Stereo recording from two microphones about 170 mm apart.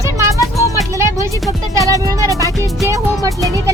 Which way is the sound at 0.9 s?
20° right (ahead or behind).